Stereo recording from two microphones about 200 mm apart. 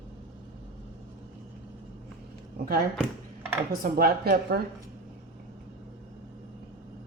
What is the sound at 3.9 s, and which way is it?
Speech, 50° right (ahead or behind).